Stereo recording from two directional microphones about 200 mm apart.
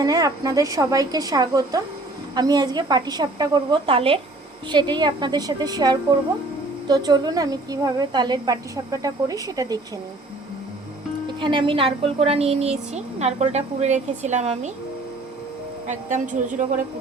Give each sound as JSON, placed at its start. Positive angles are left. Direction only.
{"t": 0.0, "sound": "a woman's voice", "side_deg": -20}
{"t": 11.3, "sound": "a woman's voice", "side_deg": -25}
{"t": 15.9, "sound": "a woman's voice", "side_deg": -40}